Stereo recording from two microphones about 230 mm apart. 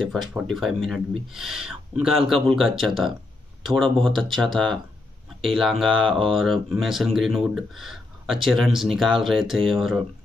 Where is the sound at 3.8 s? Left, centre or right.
Right.